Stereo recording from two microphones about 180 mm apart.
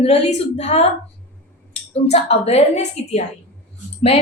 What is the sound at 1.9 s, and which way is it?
A woman's voice, 35° left (ahead or behind).